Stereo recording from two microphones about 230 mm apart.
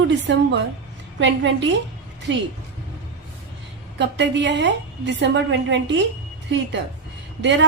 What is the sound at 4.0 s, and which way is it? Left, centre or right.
A woman's voice, right.